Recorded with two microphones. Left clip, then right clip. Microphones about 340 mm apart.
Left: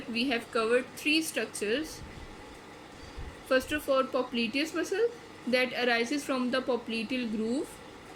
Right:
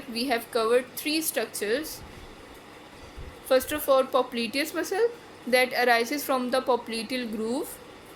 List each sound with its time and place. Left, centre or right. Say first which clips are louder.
0.1 s a woman's voice: right 3 dB; centre
3.5 s a woman's voice: right 5 dB; centre